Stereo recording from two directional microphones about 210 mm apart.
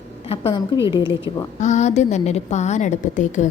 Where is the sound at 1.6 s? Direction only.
35° left (ahead or behind).